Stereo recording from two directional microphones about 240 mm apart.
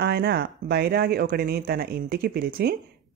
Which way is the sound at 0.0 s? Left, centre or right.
Right.